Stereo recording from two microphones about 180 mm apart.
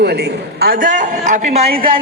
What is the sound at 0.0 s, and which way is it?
A man's voice, 65° right (ahead or behind).